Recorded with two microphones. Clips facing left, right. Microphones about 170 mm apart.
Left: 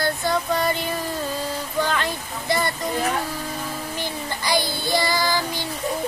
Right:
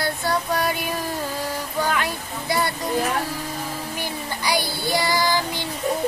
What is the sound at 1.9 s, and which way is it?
Waterfall, 10° right (ahead or behind).